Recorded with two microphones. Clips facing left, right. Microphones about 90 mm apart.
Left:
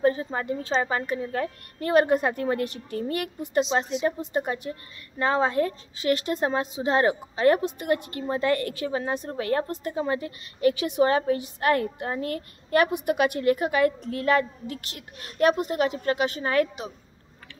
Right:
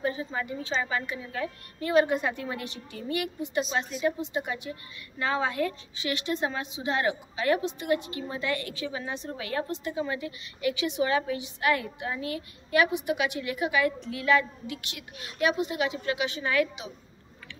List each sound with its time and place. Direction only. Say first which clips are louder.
0.0 s a woman's voice: left 6 dB; 45° left (ahead or behind)
3.6 s a woman's voice: left 3 dB; 25° left (ahead or behind)
4.2 s a woman's voice: left 4 dB; 45° left (ahead or behind)